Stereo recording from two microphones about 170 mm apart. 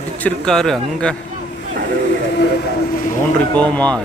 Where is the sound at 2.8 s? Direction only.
55° left (ahead or behind).